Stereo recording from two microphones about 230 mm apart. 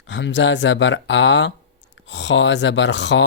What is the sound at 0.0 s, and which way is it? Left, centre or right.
Speech, left.